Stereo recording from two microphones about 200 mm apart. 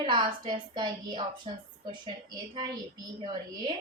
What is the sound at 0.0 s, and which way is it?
A woman's voice, 25° right (ahead or behind).